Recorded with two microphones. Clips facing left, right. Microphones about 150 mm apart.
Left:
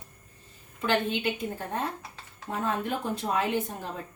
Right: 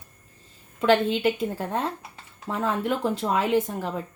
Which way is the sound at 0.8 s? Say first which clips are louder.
Right 7 dB; 90° right.